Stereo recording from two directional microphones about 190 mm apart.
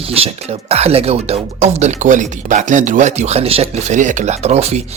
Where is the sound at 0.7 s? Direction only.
30° right (ahead or behind).